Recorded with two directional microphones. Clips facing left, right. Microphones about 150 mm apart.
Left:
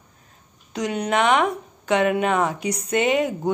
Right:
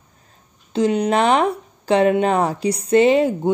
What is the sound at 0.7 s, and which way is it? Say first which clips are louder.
A woman's voice: right 5 dB; 30° right (ahead or behind).